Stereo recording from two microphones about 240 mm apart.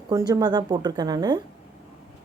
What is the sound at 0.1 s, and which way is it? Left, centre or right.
A woman's voice, centre.